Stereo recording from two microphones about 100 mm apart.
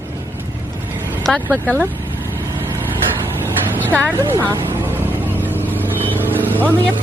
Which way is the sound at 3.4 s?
20° left (ahead or behind).